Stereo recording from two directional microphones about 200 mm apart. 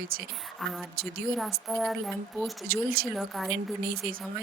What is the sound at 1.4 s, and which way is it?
A woman's voice, centre (ahead or behind).